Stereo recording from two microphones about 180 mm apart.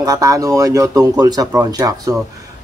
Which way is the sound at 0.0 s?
20° right (ahead or behind).